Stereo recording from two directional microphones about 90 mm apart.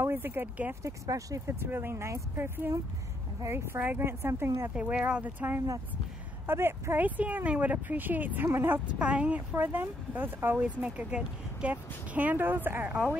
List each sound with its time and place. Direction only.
0.0 s speech: 25° right (ahead or behind)
0.8 s speech: 40° right (ahead or behind)
1.7 s speech: 25° right (ahead or behind)
4.7 s speech: 15° right (ahead or behind)
8.9 s speech: 15° right (ahead or behind)